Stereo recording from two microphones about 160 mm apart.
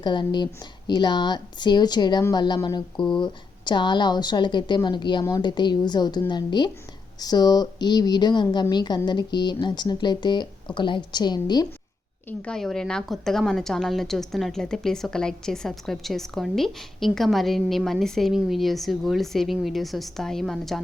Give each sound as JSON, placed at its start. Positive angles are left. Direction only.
{"t": 0.0, "sound": "speech", "side_deg": 30}
{"t": 12.4, "sound": "a woman's voice", "side_deg": 5}